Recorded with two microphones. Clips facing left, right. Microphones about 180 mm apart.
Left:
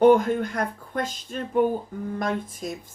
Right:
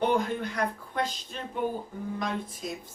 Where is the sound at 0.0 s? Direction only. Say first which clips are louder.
Left 9 dB; 50° left (ahead or behind).